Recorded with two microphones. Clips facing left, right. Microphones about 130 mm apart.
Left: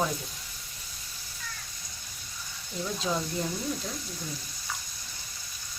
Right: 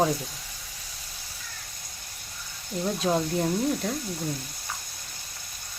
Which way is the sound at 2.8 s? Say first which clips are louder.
Right 6 dB; 50° right (ahead or behind).